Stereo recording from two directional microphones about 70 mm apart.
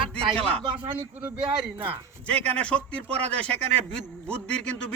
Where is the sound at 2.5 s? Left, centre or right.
Centre.